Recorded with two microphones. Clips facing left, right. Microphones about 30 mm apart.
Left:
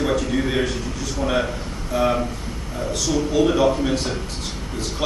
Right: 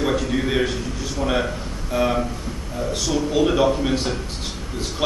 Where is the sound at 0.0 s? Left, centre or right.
Centre.